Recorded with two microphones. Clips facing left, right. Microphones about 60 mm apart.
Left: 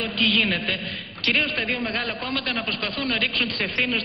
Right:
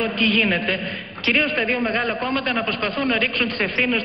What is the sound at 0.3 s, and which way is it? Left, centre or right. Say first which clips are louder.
A man's voice: right 4 dB; right.